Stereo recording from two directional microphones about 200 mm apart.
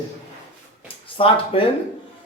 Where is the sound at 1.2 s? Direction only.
25° left (ahead or behind).